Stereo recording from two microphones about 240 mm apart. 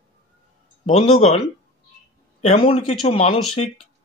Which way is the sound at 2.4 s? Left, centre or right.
Left.